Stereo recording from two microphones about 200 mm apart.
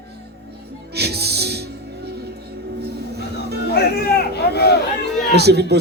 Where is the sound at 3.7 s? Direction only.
50° left (ahead or behind).